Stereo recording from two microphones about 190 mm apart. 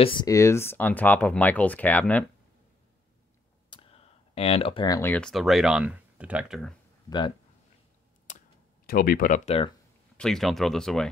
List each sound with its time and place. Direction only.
0.0 s speech: 25° left (ahead or behind); by 2.2 s 10° left (ahead or behind)
3.7 s speech: 30° left (ahead or behind); by 6.7 s 5° right (ahead or behind)
7.1 s speech: 25° left (ahead or behind)
8.8 s speech: 50° left (ahead or behind)
10.1 s speech: 5° left (ahead or behind)